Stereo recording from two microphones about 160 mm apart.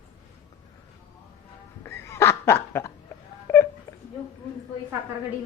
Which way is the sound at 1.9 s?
15° left (ahead or behind).